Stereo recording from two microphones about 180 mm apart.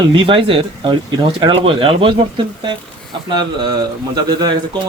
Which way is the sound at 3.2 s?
25° right (ahead or behind).